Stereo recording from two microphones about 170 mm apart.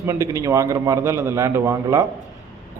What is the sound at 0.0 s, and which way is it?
A man's voice, 20° right (ahead or behind).